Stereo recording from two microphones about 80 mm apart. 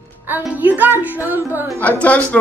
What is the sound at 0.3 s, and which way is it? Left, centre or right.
Music, right.